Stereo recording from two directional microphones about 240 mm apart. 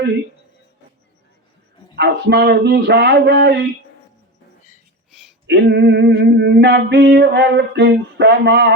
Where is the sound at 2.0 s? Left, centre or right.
Right.